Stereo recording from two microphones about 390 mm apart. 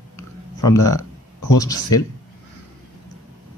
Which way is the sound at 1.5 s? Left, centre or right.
Centre.